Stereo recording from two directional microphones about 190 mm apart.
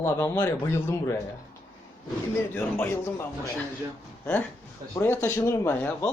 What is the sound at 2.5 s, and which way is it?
A man's voice, 10° left (ahead or behind).